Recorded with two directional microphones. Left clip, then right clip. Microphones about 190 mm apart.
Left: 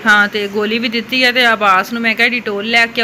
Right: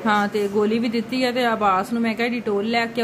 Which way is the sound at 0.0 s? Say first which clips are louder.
Left 9 dB; 10° right (ahead or behind).